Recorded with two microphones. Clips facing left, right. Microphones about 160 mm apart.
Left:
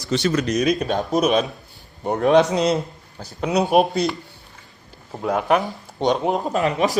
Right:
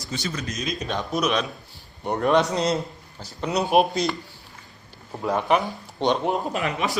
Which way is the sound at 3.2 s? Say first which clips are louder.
Left 4 dB; 50° left (ahead or behind).